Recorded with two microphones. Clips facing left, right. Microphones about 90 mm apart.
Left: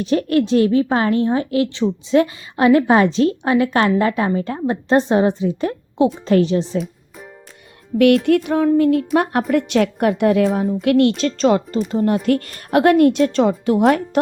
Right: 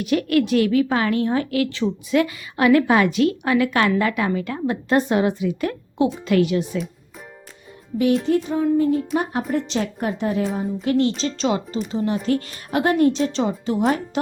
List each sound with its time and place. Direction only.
0.0 s a woman's voice: 30° left (ahead or behind)
8.2 s a woman's voice: 70° left (ahead or behind)
10.8 s a woman's voice: 65° left (ahead or behind)
11.2 s a woman's voice: 50° left (ahead or behind)